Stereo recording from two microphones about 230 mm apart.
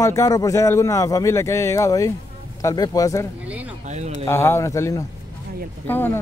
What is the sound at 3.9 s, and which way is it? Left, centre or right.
Speech, right.